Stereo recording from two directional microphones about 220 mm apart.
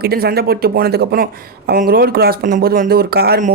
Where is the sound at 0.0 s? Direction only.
45° right (ahead or behind).